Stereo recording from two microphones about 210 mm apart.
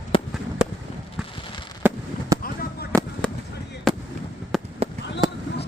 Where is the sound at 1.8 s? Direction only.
10° right (ahead or behind).